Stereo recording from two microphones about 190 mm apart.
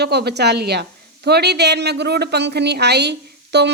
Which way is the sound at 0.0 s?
60° right (ahead or behind).